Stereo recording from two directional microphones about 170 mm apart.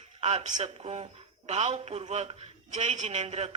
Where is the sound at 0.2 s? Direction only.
40° right (ahead or behind).